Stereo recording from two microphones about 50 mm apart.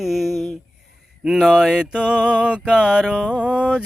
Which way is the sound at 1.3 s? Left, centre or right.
Centre.